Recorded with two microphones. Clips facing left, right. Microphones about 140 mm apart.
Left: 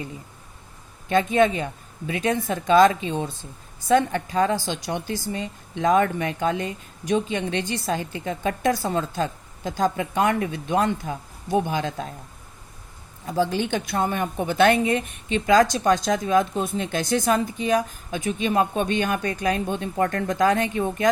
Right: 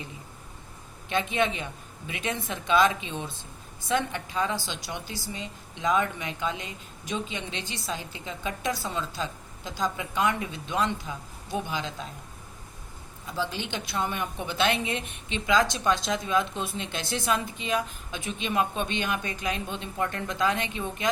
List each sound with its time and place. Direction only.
1.1 s speech: 45° left (ahead or behind)
13.2 s speech: 50° left (ahead or behind)